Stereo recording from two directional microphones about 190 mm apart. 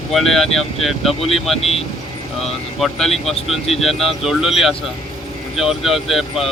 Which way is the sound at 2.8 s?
Centre (ahead or behind).